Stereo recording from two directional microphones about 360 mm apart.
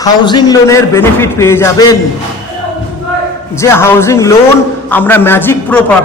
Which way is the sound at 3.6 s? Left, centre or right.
Centre.